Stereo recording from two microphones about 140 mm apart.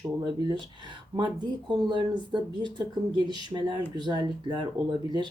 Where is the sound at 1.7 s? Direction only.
35° right (ahead or behind).